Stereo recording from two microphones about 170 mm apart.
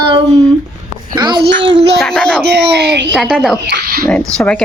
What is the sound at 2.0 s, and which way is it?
Speech, 5° left (ahead or behind).